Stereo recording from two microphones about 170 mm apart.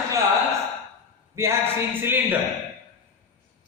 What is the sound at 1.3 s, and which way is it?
A woman's voice, 15° right (ahead or behind).